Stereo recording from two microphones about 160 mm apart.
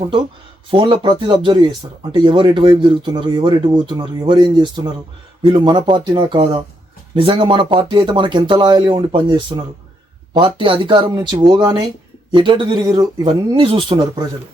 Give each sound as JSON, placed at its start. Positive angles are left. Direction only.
{"t": 0.7, "sound": "speech", "side_deg": -30}